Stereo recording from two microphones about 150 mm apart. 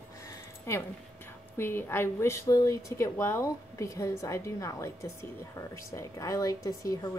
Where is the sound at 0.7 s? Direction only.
15° left (ahead or behind).